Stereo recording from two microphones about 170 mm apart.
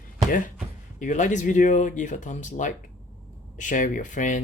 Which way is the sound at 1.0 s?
45° left (ahead or behind).